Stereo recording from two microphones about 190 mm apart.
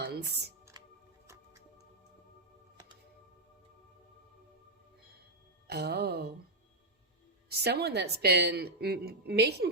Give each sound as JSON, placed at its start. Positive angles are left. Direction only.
{"t": 0.1, "sound": "a woman's voice", "side_deg": -60}
{"t": 5.6, "sound": "a woman's voice", "side_deg": -60}
{"t": 7.5, "sound": "a woman's voice", "side_deg": -60}